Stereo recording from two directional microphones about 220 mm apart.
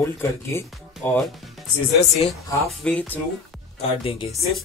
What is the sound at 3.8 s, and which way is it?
Speech, 25° left (ahead or behind).